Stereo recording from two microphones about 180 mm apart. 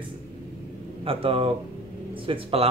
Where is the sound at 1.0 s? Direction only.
30° right (ahead or behind).